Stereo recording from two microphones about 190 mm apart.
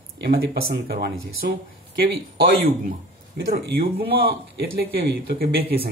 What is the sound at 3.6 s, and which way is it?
Speech, 55° right (ahead or behind).